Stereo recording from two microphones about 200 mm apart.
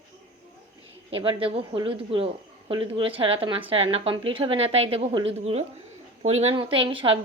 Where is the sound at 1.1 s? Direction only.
25° right (ahead or behind).